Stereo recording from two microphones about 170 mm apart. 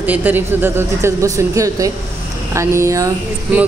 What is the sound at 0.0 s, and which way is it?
A woman's voice, 10° right (ahead or behind).